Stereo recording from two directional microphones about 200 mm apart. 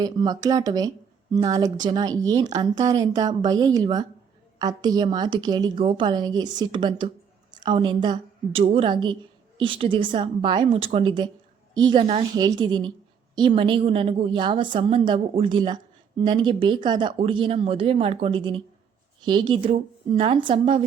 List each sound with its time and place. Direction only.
0.0 s a woman's voice: 20° right (ahead or behind)